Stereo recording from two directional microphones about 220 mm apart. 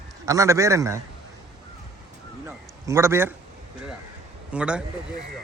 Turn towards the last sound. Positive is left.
turn(degrees=-5)  # may be behind; listen again after turning